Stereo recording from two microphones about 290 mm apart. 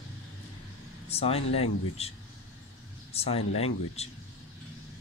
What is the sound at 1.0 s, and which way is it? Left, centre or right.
Speech, left.